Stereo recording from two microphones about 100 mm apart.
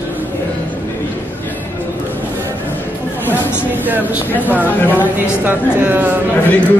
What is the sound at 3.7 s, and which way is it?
A woman's voice, 20° right (ahead or behind).